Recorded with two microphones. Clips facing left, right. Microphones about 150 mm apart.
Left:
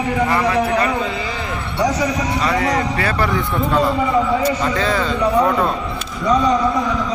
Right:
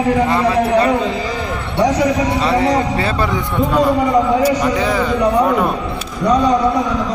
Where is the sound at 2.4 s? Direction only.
30° right (ahead or behind); by 5.8 s 10° right (ahead or behind).